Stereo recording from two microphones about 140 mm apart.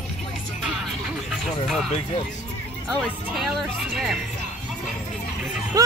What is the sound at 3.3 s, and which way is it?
Speech, centre (ahead or behind).